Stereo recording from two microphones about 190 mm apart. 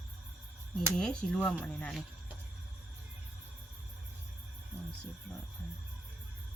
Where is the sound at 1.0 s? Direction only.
5° left (ahead or behind).